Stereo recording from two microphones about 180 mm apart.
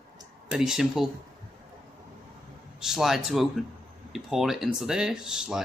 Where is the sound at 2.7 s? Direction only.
Centre (ahead or behind).